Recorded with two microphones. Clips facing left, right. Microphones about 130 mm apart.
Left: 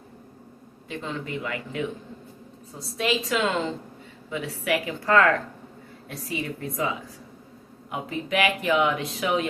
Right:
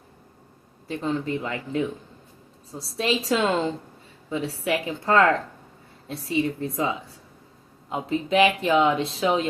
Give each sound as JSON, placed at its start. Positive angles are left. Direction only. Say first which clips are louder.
{"t": 0.9, "sound": "speech", "louder": "right 6 dB", "side_deg": -35}
{"t": 7.9, "sound": "speech", "louder": "right 4 dB", "side_deg": -30}